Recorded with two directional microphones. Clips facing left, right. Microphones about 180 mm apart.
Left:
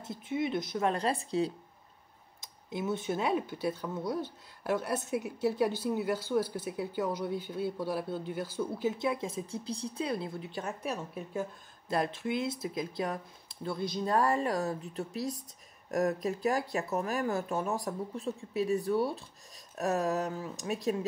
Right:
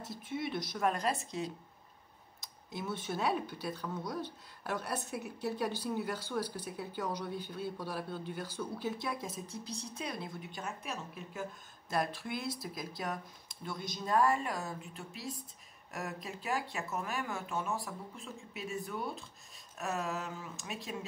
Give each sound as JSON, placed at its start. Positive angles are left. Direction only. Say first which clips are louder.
{"t": 0.1, "sound": "speech", "louder": "left 6 dB", "side_deg": 20}
{"t": 2.8, "sound": "speech", "louder": "left 4 dB", "side_deg": 20}
{"t": 11.9, "sound": "speech", "louder": "left 4 dB", "side_deg": 25}